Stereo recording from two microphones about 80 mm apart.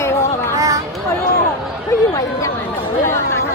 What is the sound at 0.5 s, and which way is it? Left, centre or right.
Chatter, right.